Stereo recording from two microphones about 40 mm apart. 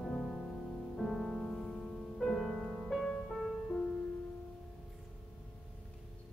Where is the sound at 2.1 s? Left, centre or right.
Centre.